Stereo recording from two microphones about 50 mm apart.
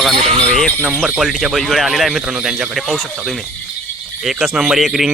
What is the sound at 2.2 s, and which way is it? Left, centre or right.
Speech, centre.